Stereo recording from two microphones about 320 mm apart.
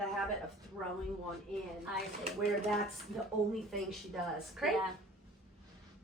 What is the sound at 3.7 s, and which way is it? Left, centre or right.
A woman's voice, centre.